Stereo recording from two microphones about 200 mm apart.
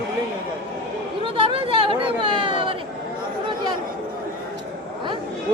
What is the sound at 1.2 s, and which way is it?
Chatter, 25° right (ahead or behind).